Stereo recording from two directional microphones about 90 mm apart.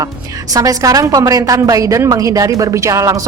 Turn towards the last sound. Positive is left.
turn(degrees=-40)  # may be behind; listen again after turning